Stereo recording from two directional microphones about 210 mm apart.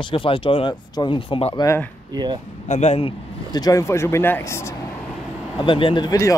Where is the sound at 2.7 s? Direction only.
30° left (ahead or behind); by 4.7 s 15° left (ahead or behind).